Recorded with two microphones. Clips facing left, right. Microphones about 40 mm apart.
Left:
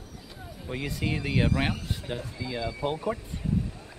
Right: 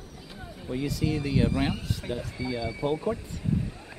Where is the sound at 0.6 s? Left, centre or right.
Left.